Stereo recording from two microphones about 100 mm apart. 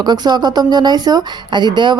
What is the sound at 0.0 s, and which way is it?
A woman's voice, 45° right (ahead or behind).